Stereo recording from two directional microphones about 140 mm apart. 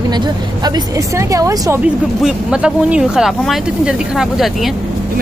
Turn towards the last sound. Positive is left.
turn(degrees=0)  # may be behind; listen again after turning